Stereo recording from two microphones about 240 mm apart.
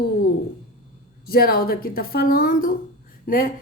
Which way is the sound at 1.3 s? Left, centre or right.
Left.